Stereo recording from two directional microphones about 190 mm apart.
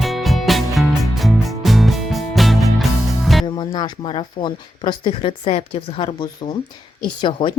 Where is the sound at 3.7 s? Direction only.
25° left (ahead or behind).